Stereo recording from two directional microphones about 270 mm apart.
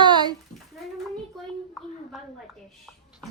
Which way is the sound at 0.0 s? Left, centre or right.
Centre.